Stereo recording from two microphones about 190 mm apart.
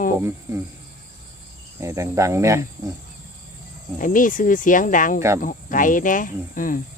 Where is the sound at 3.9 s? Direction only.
45° left (ahead or behind).